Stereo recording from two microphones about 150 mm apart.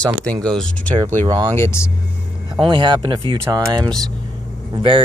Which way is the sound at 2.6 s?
30° right (ahead or behind).